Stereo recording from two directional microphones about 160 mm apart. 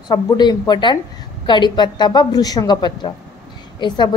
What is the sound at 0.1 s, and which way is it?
A woman's voice, 25° left (ahead or behind).